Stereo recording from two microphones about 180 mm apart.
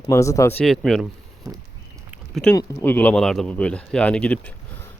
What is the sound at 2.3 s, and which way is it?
Speech, 5° left (ahead or behind).